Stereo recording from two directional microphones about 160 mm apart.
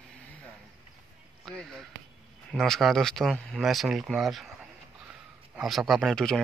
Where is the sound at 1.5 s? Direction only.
Centre (ahead or behind).